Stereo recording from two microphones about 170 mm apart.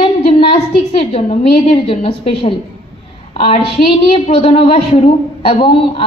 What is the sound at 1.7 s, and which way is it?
Speech, 35° left (ahead or behind).